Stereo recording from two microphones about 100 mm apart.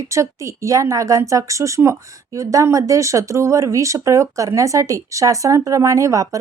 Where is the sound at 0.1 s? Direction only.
30° right (ahead or behind).